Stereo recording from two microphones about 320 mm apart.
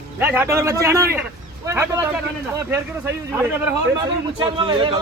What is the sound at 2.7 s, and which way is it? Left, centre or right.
A man's voice, centre.